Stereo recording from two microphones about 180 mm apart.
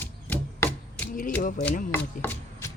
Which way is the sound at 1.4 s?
50° left (ahead or behind).